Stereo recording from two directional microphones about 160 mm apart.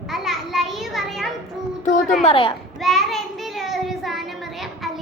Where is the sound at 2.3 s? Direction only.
35° left (ahead or behind).